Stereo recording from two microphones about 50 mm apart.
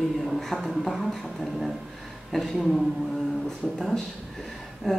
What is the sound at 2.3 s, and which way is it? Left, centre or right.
Speech, centre.